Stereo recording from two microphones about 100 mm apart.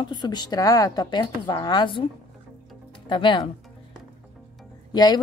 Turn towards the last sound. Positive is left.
turn(degrees=45)  # may be behind; listen again after turning